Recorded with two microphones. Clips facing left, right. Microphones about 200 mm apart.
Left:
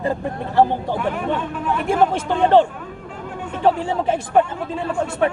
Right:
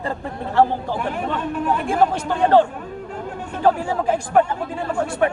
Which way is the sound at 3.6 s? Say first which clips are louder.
Even; 25° left (ahead or behind).